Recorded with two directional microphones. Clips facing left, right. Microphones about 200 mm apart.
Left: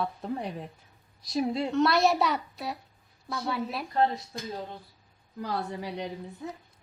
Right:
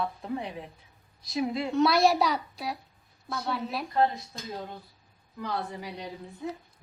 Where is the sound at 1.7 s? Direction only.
Centre (ahead or behind).